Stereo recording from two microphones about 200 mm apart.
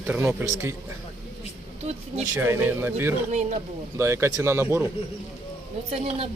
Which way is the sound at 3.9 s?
15° right (ahead or behind).